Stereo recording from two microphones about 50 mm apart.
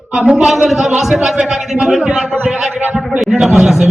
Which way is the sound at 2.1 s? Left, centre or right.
Right.